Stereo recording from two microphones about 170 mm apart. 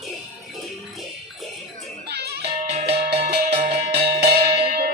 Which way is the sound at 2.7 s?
40° right (ahead or behind).